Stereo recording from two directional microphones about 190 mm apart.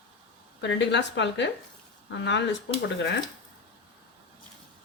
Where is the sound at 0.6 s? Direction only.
70° left (ahead or behind).